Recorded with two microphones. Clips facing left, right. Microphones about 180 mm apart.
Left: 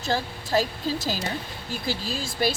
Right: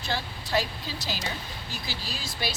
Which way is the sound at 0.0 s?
45° left (ahead or behind).